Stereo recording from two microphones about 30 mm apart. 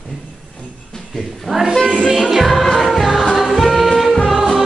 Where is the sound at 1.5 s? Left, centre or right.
Centre.